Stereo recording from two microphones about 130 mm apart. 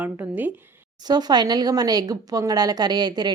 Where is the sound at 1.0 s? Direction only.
30° right (ahead or behind).